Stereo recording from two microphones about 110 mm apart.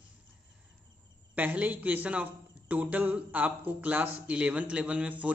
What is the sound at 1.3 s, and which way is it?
A man's voice, 15° right (ahead or behind).